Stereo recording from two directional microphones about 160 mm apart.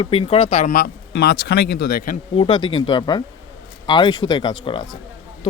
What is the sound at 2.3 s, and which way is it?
Speech, 30° left (ahead or behind).